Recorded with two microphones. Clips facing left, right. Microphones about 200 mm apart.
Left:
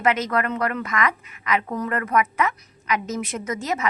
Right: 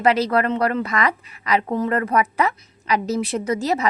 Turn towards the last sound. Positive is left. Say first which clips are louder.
# right 5 dB
turn(degrees=-35)  # may be behind; listen again after turning